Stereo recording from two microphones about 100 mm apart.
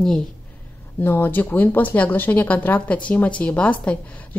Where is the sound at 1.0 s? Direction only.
20° left (ahead or behind).